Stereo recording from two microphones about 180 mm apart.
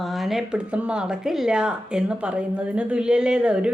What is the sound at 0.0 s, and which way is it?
Speech, centre (ahead or behind).